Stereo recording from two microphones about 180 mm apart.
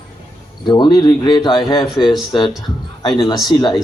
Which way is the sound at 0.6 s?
25° left (ahead or behind).